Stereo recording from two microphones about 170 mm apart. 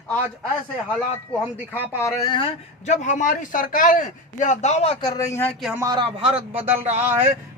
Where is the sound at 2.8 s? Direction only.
45° left (ahead or behind).